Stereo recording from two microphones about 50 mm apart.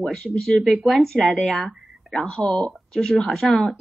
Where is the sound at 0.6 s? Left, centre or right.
Centre.